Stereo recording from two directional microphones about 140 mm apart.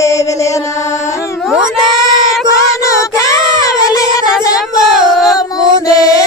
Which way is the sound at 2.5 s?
25° left (ahead or behind).